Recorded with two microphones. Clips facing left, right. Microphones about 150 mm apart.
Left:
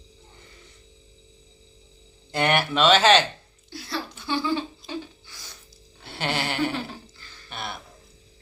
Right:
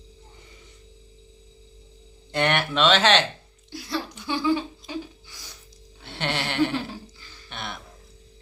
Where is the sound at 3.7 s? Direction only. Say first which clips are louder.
Right 2 dB; 15° right (ahead or behind).